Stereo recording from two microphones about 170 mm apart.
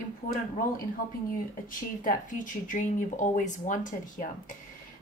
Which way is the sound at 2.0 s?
50° left (ahead or behind).